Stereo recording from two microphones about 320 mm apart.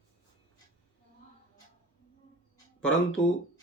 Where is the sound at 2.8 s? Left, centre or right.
Centre.